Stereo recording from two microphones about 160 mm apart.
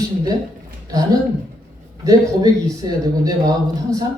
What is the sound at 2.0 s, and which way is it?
A woman's voice, 25° right (ahead or behind).